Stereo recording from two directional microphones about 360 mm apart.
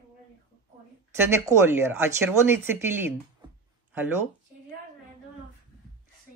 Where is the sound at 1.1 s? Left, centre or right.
Centre.